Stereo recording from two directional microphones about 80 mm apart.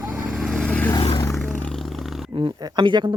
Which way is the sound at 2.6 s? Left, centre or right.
Right.